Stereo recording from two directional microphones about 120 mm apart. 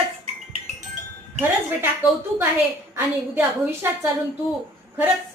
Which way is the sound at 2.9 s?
20° right (ahead or behind).